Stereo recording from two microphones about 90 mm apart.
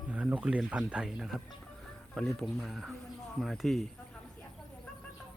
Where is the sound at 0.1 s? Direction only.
15° right (ahead or behind).